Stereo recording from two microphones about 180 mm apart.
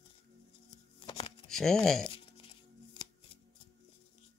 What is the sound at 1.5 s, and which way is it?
Speech, 5° left (ahead or behind).